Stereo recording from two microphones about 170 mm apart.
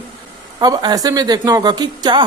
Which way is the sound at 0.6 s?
25° right (ahead or behind).